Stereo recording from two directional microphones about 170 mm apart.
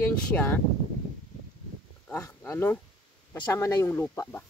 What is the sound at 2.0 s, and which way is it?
Speech, 20° left (ahead or behind).